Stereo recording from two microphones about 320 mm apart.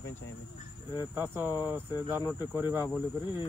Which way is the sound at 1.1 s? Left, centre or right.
Centre.